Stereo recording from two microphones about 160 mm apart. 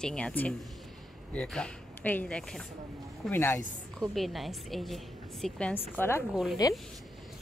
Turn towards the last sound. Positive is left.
turn(degrees=25)  # may be behind; listen again after turning